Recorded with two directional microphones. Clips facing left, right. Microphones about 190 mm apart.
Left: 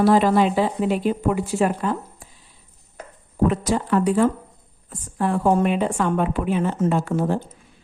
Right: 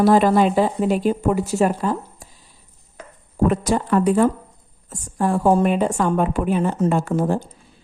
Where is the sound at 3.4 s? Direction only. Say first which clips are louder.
Right 2 dB; 50° right (ahead or behind).